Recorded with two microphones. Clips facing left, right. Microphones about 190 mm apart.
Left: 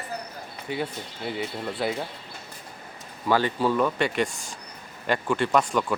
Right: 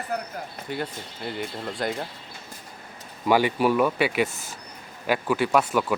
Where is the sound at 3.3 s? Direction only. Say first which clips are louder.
Right 2 dB; 15° right (ahead or behind).